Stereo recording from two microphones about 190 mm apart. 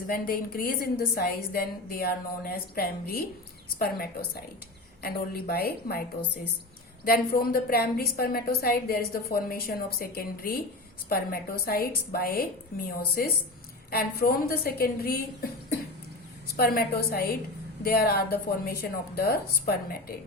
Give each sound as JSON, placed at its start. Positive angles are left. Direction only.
{"t": 0.1, "sound": "a woman's voice", "side_deg": 50}
{"t": 7.0, "sound": "a woman's voice", "side_deg": 50}
{"t": 16.6, "sound": "a woman's voice", "side_deg": 55}